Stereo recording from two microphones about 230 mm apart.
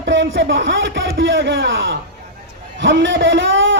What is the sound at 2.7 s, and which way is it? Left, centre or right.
A man's voice, right.